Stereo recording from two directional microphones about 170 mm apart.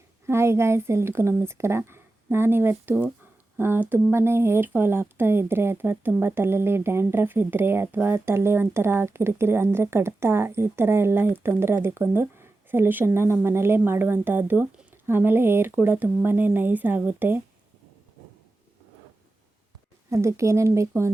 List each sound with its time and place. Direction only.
0.3 s speech: 15° right (ahead or behind)
20.1 s speech: 15° right (ahead or behind)